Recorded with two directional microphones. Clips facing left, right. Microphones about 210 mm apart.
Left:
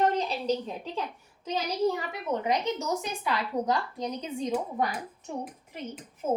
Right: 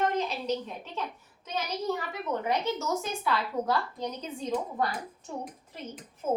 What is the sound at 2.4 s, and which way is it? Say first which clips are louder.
A woman's voice: even; 15° left (ahead or behind).